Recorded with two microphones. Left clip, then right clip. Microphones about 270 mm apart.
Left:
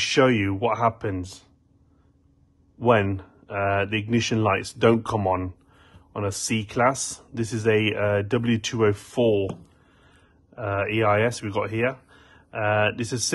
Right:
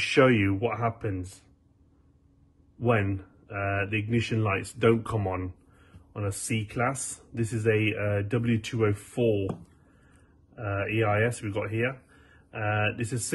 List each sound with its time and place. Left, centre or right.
0.0 s speech: centre
2.8 s speech: centre
10.5 s speech: centre